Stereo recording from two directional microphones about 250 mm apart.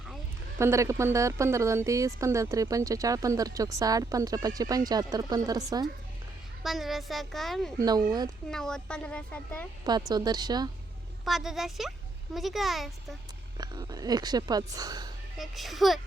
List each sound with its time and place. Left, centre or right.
0.6 s speech: centre
6.6 s speech: centre
7.8 s speech: centre
8.4 s speech: centre
10.1 s speech: centre
11.3 s speech: centre
13.6 s speech: centre
15.4 s speech: centre